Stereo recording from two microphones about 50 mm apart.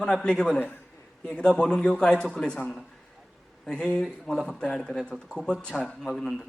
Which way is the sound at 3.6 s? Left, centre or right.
Centre.